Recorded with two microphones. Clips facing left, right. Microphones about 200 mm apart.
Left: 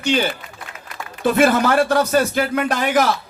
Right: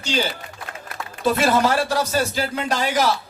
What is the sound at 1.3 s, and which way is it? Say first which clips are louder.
A man's voice: left 3 dB; 55° left (ahead or behind).